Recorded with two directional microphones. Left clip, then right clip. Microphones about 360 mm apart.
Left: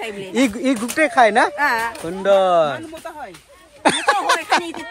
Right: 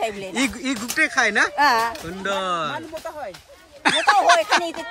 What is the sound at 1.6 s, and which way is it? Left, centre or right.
Speech, centre.